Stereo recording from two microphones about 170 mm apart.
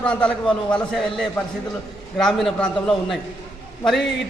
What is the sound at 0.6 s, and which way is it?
A man's voice, 5° left (ahead or behind).